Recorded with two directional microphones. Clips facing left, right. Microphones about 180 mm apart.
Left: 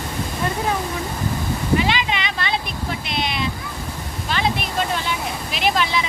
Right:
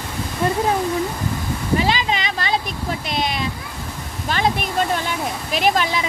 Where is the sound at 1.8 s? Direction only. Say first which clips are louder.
Right 1 dB; 40° right (ahead or behind).